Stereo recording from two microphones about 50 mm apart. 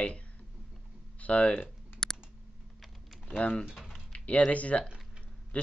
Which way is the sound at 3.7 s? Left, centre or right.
Centre.